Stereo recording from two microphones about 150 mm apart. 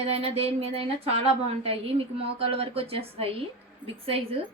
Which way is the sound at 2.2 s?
40° right (ahead or behind).